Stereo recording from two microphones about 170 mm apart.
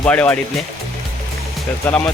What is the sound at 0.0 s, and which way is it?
Speech, 10° left (ahead or behind).